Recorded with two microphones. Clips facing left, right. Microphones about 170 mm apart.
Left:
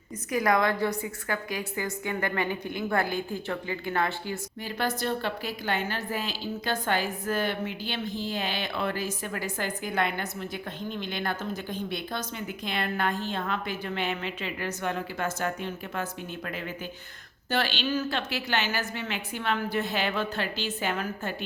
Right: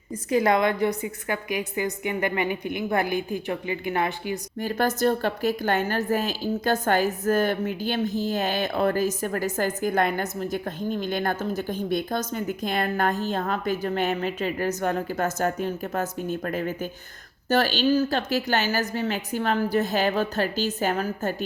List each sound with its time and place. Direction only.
0.3 s a woman's voice: 25° right (ahead or behind)
4.6 s a woman's voice: 45° right (ahead or behind)